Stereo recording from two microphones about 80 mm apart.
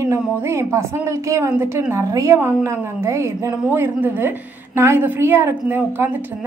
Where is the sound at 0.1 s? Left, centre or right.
Right.